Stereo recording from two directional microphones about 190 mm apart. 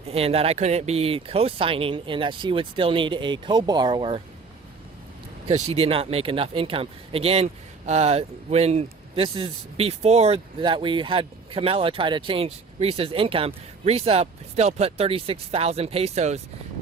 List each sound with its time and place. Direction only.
0.1 s speech: 30° right (ahead or behind)
5.5 s speech: 35° right (ahead or behind)